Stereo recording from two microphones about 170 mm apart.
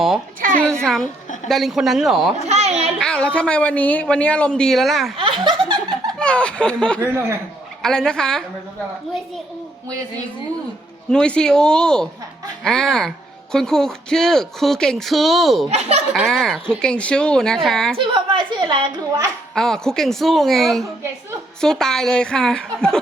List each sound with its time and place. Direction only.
0.7 s a woman's voice: 5° left (ahead or behind)
2.5 s a sound: 40° right (ahead or behind)
3.0 s speech: 5° left (ahead or behind)
5.4 s laughter: 30° right (ahead or behind)
5.9 s laughter: 5° left (ahead or behind)
7.0 s a man's voice: 15° right (ahead or behind)
7.8 s speech: 5° left (ahead or behind)
11.1 s speech: 5° left (ahead or behind)
15.7 s speech: 40° right (ahead or behind)
16.1 s speech: centre (ahead or behind)
17.9 s a woman's voice: 30° right (ahead or behind)
19.5 s speech: 5° left (ahead or behind)